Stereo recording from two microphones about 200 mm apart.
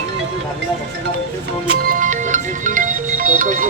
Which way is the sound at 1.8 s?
45° right (ahead or behind).